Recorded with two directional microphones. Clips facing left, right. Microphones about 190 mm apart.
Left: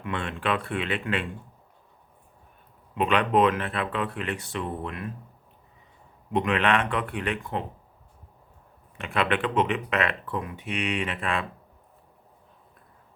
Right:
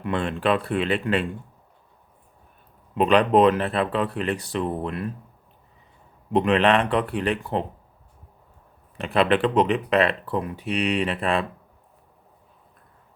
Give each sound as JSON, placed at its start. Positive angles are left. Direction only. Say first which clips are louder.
{"t": 0.0, "sound": "speech", "louder": "right 6 dB", "side_deg": -35}
{"t": 2.9, "sound": "speech", "louder": "right 5 dB", "side_deg": -35}
{"t": 6.3, "sound": "speech", "louder": "right 5 dB", "side_deg": -35}
{"t": 9.0, "sound": "speech", "louder": "right 6 dB", "side_deg": -35}